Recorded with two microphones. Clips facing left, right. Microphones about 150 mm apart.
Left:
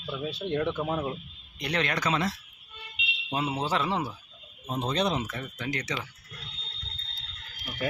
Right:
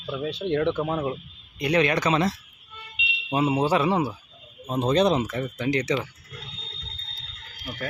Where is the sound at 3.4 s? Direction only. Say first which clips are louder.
Right 7 dB; 15° right (ahead or behind).